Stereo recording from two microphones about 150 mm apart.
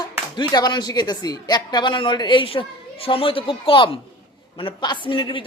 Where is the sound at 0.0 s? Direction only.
25° left (ahead or behind).